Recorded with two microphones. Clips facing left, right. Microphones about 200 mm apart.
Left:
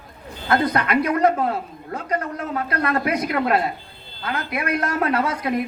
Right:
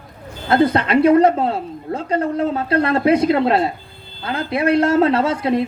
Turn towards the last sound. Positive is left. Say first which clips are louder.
# right 5 dB
turn(degrees=-25)  # may be behind; listen again after turning